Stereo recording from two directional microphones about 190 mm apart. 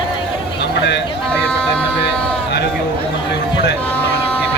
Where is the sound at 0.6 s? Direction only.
65° left (ahead or behind).